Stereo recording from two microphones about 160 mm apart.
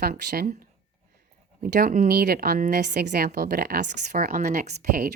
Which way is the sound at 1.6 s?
70° right (ahead or behind).